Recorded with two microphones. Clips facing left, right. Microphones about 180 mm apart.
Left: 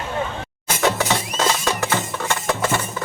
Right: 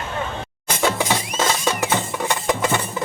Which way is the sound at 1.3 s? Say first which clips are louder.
Even; 15° right (ahead or behind).